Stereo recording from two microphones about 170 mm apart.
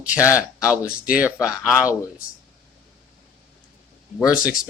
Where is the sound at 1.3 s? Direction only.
15° left (ahead or behind).